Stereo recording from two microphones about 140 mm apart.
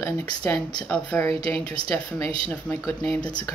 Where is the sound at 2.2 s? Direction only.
40° right (ahead or behind).